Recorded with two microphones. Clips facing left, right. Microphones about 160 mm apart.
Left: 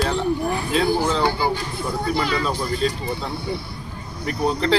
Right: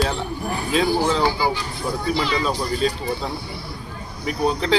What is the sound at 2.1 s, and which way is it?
Speech, 50° left (ahead or behind).